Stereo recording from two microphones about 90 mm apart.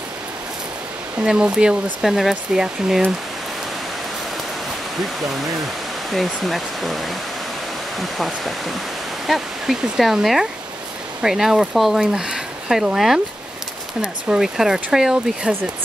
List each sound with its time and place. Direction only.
1.2 s speech: 10° right (ahead or behind)
6.1 s speech: centre (ahead or behind)